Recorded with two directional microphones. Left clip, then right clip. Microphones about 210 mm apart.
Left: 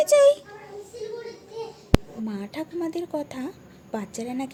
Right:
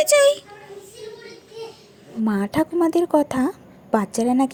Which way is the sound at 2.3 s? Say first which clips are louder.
Right 12 dB; 35° right (ahead or behind).